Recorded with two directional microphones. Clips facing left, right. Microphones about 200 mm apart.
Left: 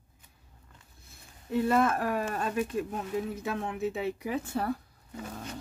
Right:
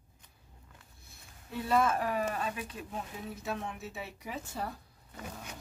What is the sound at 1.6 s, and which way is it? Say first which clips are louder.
Speech: left 2 dB; 55° left (ahead or behind).